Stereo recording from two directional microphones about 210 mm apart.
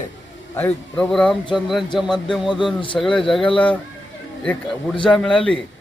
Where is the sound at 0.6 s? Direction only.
5° left (ahead or behind).